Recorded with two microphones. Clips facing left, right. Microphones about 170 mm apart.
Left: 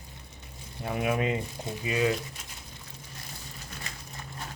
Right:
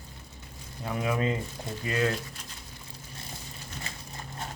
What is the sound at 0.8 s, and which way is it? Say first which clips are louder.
Speech: left 1 dB; 20° left (ahead or behind).